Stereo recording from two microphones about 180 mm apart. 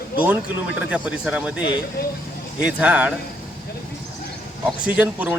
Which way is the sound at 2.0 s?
60° left (ahead or behind).